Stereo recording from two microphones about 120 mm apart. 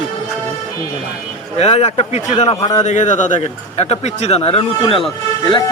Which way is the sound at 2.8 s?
90° left.